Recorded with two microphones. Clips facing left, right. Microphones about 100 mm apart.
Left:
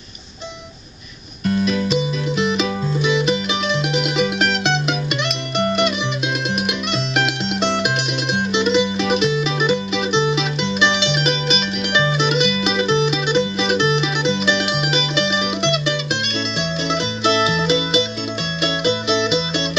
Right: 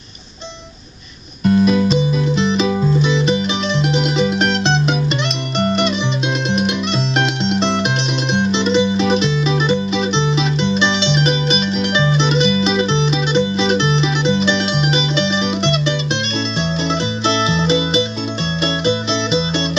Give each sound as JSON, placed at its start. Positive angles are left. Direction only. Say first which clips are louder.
{"t": 1.4, "sound": "music", "louder": "right 6 dB", "side_deg": -25}
{"t": 1.9, "sound": "music", "louder": "right 4 dB", "side_deg": 10}
{"t": 5.6, "sound": "music", "louder": "right 1 dB", "side_deg": 0}
{"t": 7.2, "sound": "music", "louder": "right 2 dB", "side_deg": 5}
{"t": 8.8, "sound": "music", "louder": "right 4 dB", "side_deg": -30}
{"t": 9.1, "sound": "music", "louder": "right 2 dB", "side_deg": 10}
{"t": 17.2, "sound": "music", "louder": "left 1 dB", "side_deg": 5}